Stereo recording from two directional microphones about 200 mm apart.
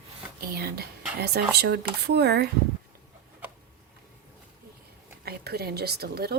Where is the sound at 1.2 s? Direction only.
55° right (ahead or behind).